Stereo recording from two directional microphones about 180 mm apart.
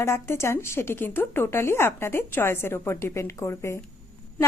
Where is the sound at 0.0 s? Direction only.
15° left (ahead or behind).